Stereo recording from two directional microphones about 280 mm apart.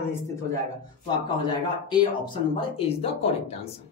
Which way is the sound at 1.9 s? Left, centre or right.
Centre.